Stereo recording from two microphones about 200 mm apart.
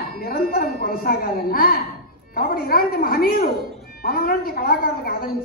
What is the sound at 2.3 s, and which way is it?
Speech, 45° left (ahead or behind).